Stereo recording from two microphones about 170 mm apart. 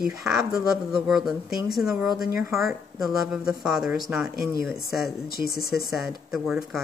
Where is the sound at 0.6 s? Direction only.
5° right (ahead or behind).